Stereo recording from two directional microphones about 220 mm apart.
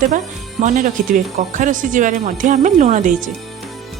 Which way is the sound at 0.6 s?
35° right (ahead or behind).